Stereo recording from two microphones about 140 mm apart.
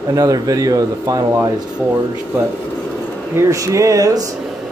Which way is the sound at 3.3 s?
20° right (ahead or behind).